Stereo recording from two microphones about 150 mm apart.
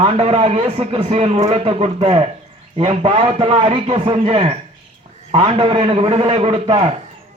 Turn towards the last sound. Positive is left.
turn(degrees=-40)  # may be behind; listen again after turning